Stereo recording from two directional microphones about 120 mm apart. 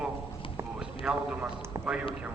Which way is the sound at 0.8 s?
5° right (ahead or behind).